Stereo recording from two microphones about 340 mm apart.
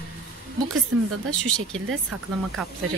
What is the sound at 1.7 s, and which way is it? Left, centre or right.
Speech, right.